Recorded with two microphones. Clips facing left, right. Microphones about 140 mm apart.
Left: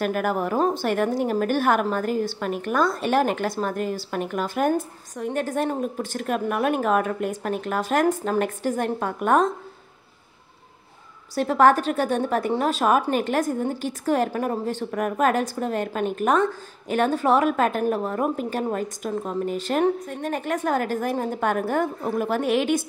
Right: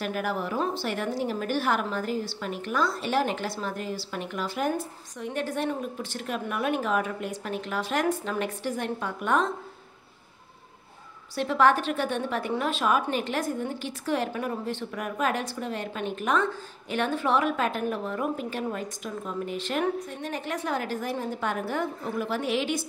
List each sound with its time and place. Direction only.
0.0 s a woman's voice: 50° left (ahead or behind)
11.3 s a woman's voice: 45° left (ahead or behind)